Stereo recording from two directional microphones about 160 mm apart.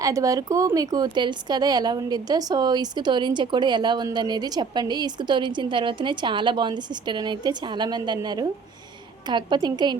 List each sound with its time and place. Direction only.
0.0 s speech: 20° right (ahead or behind)